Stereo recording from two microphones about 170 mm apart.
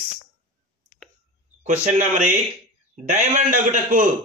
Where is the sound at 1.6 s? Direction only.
45° right (ahead or behind).